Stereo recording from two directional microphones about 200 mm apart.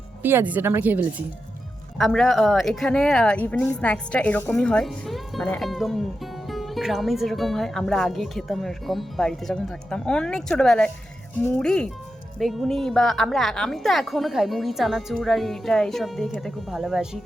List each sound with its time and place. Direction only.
0.2 s speech: 10° right (ahead or behind)
2.0 s speech: centre (ahead or behind)